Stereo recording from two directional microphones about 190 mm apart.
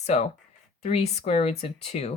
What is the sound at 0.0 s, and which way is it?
Speech, 35° left (ahead or behind).